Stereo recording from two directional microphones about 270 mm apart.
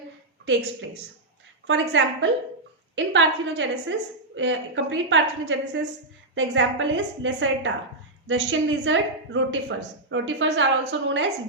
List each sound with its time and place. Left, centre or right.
0.4 s a woman's voice: right